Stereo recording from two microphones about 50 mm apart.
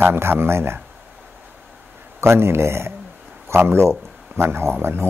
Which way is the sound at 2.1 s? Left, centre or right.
Right.